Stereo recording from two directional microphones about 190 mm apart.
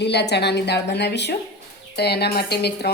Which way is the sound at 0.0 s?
60° left (ahead or behind).